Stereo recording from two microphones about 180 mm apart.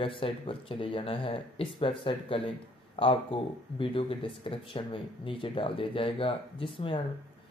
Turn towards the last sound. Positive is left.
turn(degrees=30)  # may be behind; listen again after turning